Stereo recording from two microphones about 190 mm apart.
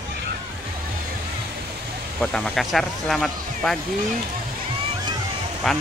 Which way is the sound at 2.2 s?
Centre (ahead or behind).